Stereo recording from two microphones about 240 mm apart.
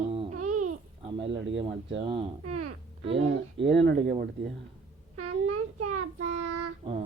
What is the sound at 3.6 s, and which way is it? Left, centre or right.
Speech, right.